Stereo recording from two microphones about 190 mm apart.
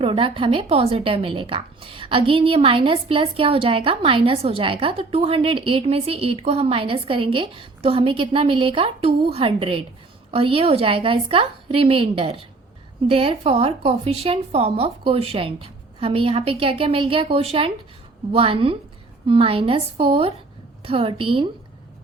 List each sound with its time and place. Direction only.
0.0 s a woman's voice: 30° right (ahead or behind)